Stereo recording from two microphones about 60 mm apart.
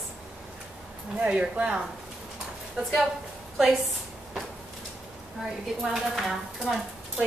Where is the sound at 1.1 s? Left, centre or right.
Centre.